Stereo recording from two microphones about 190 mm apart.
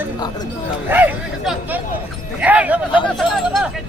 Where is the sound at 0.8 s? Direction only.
10° right (ahead or behind).